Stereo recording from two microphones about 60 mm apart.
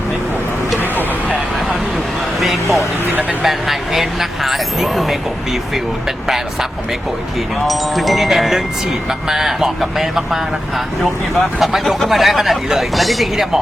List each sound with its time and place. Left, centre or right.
0.8 s vehicle: left
3.4 s speech: centre
6.2 s speech: centre
7.7 s speech: centre